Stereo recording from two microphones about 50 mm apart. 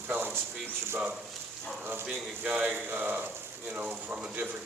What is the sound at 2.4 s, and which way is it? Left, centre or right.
Speech, right.